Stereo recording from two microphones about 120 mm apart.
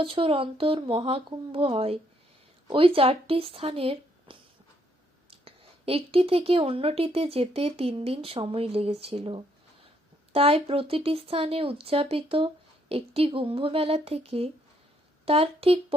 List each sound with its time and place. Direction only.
0.0 s a woman's voice: 50° right (ahead or behind)